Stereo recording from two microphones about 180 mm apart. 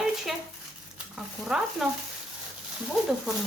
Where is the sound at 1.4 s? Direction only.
5° right (ahead or behind).